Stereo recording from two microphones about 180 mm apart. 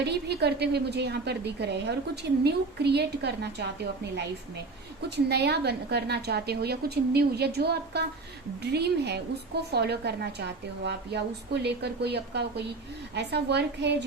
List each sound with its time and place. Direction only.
0.0 s a woman's voice: 65° right (ahead or behind)
5.0 s a woman's voice: 70° right (ahead or behind)